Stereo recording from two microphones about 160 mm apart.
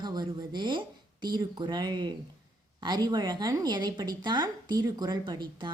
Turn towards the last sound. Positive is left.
turn(degrees=-30)  # may be behind; listen again after turning